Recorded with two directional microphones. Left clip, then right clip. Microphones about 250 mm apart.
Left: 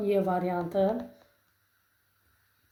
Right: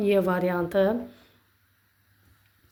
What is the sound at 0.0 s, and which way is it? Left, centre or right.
Speech, right.